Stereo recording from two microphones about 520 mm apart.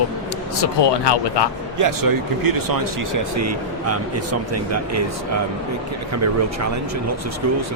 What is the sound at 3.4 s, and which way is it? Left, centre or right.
Speech, right.